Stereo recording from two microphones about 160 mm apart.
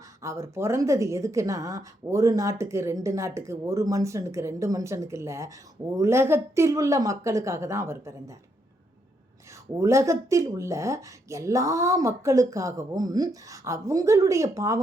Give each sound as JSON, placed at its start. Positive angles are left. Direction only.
{"t": 0.2, "sound": "a woman's voice", "side_deg": -20}
{"t": 9.7, "sound": "a woman's voice", "side_deg": -20}